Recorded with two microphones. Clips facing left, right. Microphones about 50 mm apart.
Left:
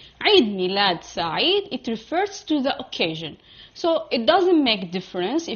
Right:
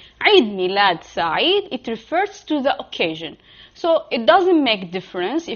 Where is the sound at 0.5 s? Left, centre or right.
Centre.